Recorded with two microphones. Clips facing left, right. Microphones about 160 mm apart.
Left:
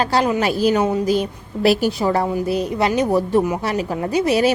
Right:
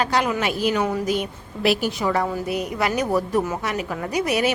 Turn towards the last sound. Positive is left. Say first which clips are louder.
# left 5 dB
turn(degrees=30)  # may be behind; listen again after turning